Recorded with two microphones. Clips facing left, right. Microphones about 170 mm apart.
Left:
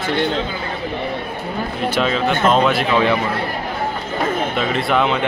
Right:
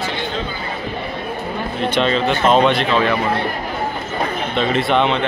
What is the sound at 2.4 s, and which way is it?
Speech, 5° right (ahead or behind).